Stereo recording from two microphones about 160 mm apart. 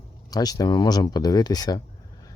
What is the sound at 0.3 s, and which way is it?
Speech, 25° left (ahead or behind).